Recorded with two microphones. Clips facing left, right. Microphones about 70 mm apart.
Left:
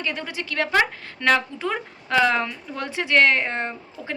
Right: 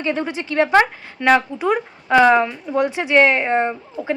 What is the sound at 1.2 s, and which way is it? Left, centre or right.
A woman's voice, centre.